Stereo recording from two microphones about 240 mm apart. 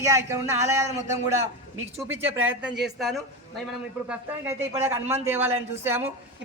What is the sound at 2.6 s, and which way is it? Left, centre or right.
Speech, centre.